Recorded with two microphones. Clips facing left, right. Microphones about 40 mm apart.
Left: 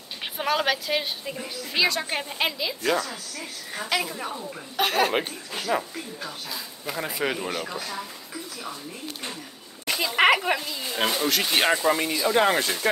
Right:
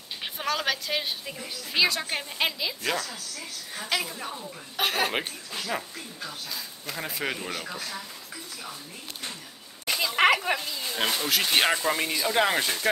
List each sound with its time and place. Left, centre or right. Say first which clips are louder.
0.2 s speech: left 4 dB; centre
4.1 s speech: left 4 dB; centre
4.7 s speech: left 4 dB; centre
5.5 s speech: left 7 dB; centre
9.8 s speech: left 2 dB; centre
11.2 s speech: left 1 dB; centre